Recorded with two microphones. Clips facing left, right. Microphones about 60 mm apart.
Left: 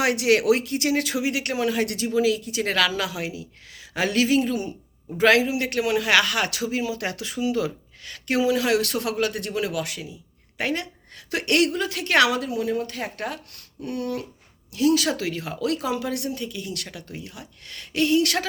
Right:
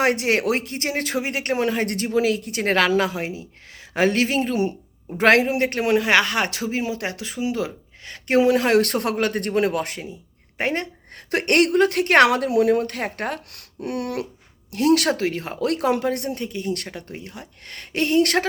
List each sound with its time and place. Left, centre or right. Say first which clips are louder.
0.0 s a woman's voice: even; right
5.6 s speech: right 3 dB; right
8.4 s a woman's voice: right 5 dB; right
13.5 s a sound: right 3 dB; right
14.7 s a woman's voice: right 3 dB; right
15.1 s speech: right 4 dB; right